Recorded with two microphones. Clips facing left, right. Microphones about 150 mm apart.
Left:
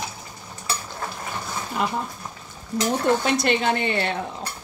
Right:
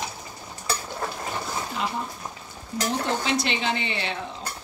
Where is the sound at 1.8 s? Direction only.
50° left (ahead or behind).